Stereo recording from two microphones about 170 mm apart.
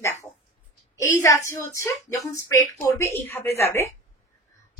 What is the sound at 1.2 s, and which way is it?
Speech, 20° left (ahead or behind).